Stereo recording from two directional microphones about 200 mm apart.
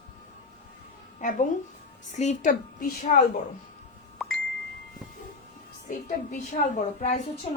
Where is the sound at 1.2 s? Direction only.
40° left (ahead or behind).